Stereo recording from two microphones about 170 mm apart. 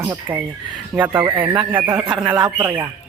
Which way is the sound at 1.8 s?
25° right (ahead or behind).